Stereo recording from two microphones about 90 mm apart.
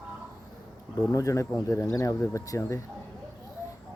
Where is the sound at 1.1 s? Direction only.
35° left (ahead or behind).